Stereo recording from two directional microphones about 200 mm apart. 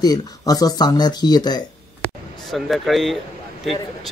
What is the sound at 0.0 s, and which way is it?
Speech, 20° left (ahead or behind).